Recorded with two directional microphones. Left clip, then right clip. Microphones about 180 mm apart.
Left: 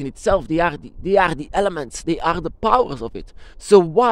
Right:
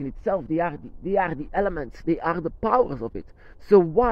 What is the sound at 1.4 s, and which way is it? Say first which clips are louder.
Speech: left 5 dB; 30° left (ahead or behind).